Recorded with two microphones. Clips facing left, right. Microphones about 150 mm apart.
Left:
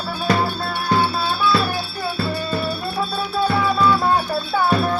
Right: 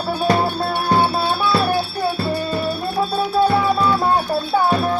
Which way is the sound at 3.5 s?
25° right (ahead or behind).